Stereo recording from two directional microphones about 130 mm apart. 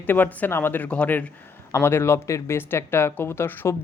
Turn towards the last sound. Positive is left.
turn(degrees=15)  # may be behind; listen again after turning